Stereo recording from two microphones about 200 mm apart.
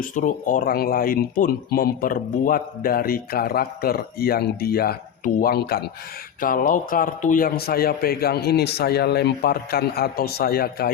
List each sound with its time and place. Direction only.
0.0 s speech: 40° left (ahead or behind)